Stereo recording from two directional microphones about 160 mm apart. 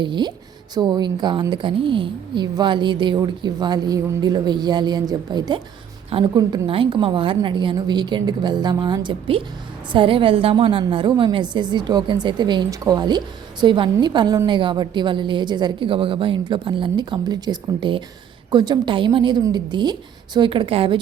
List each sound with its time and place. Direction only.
0.0 s a woman's voice: 30° right (ahead or behind)